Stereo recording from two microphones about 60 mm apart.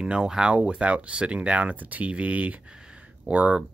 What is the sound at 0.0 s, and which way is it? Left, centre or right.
Speech, centre.